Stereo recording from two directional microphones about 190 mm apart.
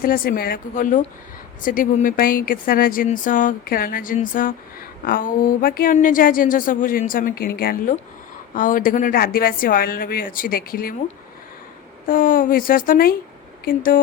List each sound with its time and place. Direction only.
0.0 s speech: 50° left (ahead or behind)
12.0 s speech: 45° left (ahead or behind)